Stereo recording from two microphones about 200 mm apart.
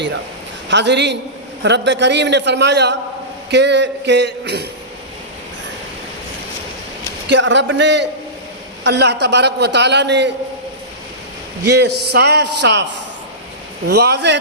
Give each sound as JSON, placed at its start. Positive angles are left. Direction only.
{"t": 0.7, "sound": "a man's voice", "side_deg": -60}
{"t": 7.3, "sound": "a man's voice", "side_deg": -65}
{"t": 11.6, "sound": "a man's voice", "side_deg": -55}
{"t": 13.8, "sound": "a man's voice", "side_deg": -55}